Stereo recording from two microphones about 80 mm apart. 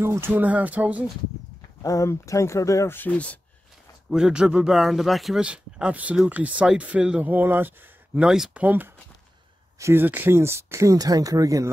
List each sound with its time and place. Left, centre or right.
0.0 s speech: right
0.3 s speech: centre
1.8 s speech: left
2.9 s speech: left
4.1 s a man's voice: centre
5.4 s speech: centre
8.2 s speech: centre
8.6 s speech: right
9.8 s speech: right
10.0 s speech: right